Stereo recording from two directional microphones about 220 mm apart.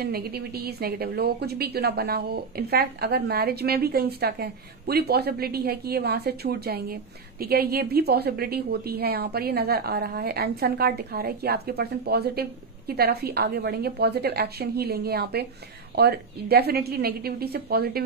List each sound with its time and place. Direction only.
0.0 s a woman's voice: 45° right (ahead or behind)